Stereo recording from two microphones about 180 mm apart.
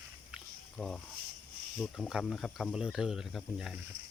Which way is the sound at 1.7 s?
Centre (ahead or behind).